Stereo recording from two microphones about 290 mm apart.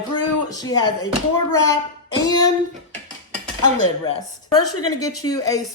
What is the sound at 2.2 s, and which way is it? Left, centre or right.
Speech, centre.